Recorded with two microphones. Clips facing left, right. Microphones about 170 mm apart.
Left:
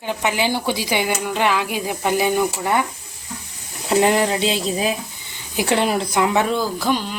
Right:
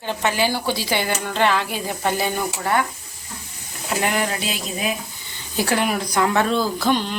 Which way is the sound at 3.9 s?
30° left (ahead or behind).